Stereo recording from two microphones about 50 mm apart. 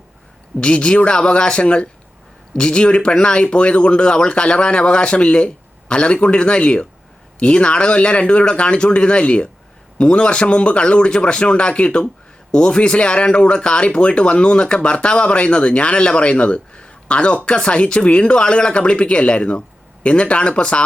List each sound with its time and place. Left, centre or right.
0.6 s speech: centre